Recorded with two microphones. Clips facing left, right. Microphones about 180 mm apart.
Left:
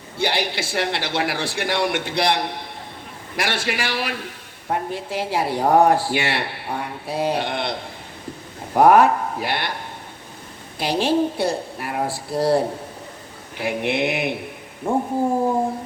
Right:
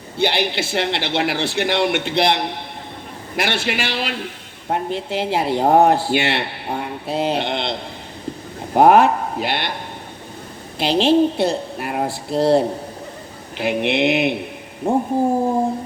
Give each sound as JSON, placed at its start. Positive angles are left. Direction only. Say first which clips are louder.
{"t": 0.2, "sound": "speech", "louder": "right 3 dB", "side_deg": -25}
{"t": 10.8, "sound": "speech", "louder": "right 5 dB", "side_deg": -25}